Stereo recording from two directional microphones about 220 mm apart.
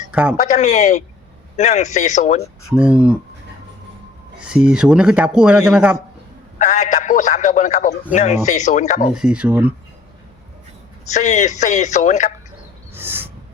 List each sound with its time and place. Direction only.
0.1 s speech: 5° right (ahead or behind)
0.3 s a man's voice: 30° left (ahead or behind)
2.7 s speech: 5° right (ahead or behind)
4.4 s speech: 5° right (ahead or behind)
6.6 s a man's voice: 30° left (ahead or behind)
9.1 s speech: 5° right (ahead or behind)
11.1 s a man's voice: 30° left (ahead or behind)
12.9 s a sound: 10° right (ahead or behind)